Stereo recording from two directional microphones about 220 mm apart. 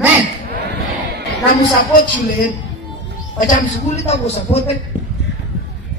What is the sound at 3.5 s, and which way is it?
Speech, 35° left (ahead or behind).